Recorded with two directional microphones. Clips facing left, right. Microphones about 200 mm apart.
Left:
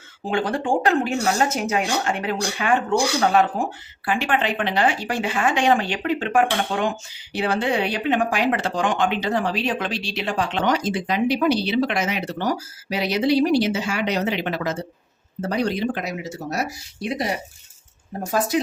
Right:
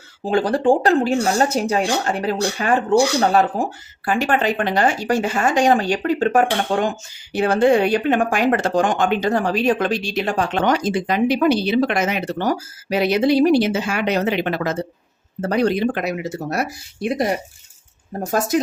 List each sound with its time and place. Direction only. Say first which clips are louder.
0.3 s speech: right 6 dB; 35° right (ahead or behind)